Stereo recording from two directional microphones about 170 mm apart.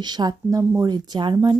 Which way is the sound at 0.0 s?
25° right (ahead or behind).